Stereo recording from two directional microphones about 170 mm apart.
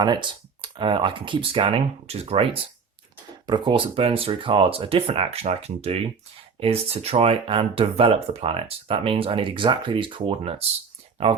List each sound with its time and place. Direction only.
0.0 s speech: 25° right (ahead or behind)